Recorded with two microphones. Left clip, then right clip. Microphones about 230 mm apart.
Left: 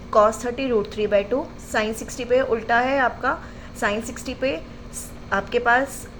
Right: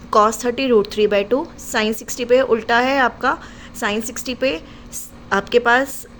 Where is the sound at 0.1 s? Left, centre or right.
Right.